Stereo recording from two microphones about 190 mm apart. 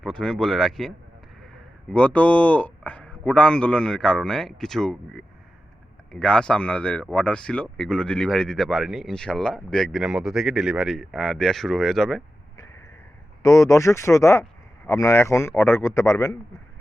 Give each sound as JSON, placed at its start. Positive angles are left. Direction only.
{"t": 0.0, "sound": "speech", "side_deg": 5}
{"t": 13.4, "sound": "a man's voice", "side_deg": 20}